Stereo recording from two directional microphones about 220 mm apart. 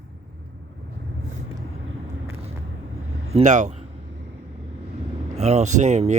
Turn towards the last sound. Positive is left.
turn(degrees=-30)  # may be behind; listen again after turning